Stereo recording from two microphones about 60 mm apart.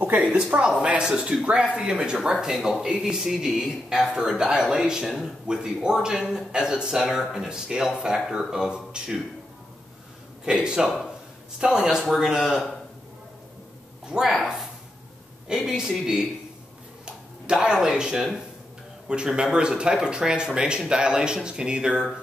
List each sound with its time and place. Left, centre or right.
0.0 s a man's voice: right
10.4 s a man's voice: centre
14.0 s a man's voice: centre